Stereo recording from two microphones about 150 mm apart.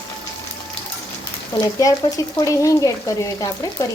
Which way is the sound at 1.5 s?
25° left (ahead or behind).